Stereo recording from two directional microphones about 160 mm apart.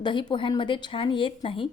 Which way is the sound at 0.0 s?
30° left (ahead or behind).